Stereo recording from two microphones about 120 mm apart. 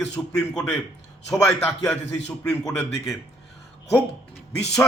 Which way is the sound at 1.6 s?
20° left (ahead or behind).